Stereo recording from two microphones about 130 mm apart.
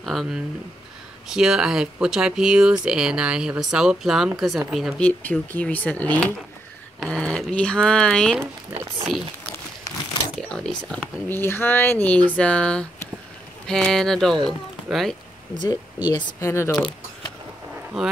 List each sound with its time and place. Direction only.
0.0 s speech: centre (ahead or behind)
5.0 s speech: 10° left (ahead or behind)
10.5 s speech: 5° left (ahead or behind)
16.1 s speech: 25° left (ahead or behind)
17.9 s speech: 5° right (ahead or behind)